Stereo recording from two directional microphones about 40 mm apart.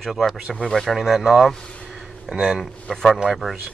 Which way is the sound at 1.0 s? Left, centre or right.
Centre.